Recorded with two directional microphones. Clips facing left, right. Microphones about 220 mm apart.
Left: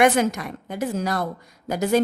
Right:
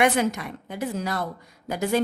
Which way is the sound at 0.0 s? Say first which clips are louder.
Left 3 dB; 45° left (ahead or behind).